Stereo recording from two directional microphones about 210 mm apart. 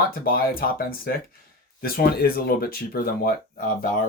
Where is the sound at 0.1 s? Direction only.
45° left (ahead or behind).